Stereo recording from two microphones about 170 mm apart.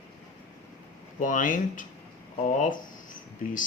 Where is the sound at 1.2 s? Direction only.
50° left (ahead or behind).